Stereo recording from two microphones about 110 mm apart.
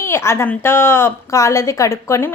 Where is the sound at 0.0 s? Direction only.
25° left (ahead or behind).